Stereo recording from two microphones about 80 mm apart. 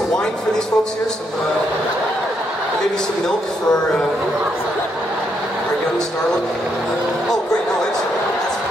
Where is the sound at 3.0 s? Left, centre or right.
Centre.